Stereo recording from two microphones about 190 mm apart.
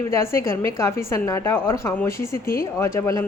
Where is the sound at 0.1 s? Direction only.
15° left (ahead or behind).